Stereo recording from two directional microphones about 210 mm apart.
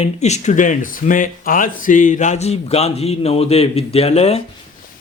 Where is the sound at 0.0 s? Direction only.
30° left (ahead or behind).